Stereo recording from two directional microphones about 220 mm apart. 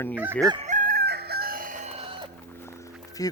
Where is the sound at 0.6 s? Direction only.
35° right (ahead or behind).